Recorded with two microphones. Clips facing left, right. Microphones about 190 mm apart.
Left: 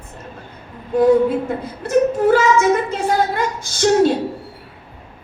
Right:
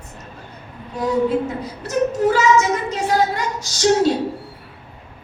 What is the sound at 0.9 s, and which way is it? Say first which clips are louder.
Speech: left 6 dB; 55° left (ahead or behind).